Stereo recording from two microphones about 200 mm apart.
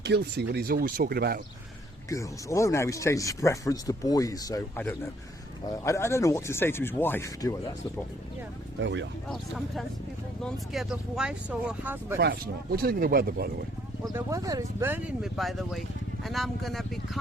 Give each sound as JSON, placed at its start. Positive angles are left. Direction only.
{"t": 0.0, "sound": "speech", "side_deg": -55}
{"t": 2.0, "sound": "speech", "side_deg": 15}
{"t": 8.8, "sound": "speech", "side_deg": -65}
{"t": 10.4, "sound": "speech", "side_deg": 0}
{"t": 12.2, "sound": "speech", "side_deg": -55}
{"t": 14.1, "sound": "speech", "side_deg": -15}